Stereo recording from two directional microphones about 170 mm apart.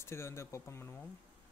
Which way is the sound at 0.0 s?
15° left (ahead or behind).